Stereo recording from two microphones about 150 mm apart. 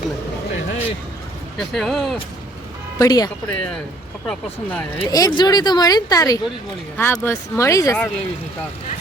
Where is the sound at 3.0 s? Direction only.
25° left (ahead or behind).